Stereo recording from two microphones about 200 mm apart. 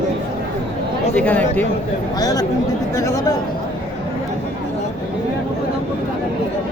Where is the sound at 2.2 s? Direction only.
15° left (ahead or behind).